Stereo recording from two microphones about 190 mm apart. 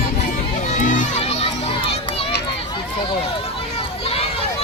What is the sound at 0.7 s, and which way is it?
Crowd, 40° left (ahead or behind).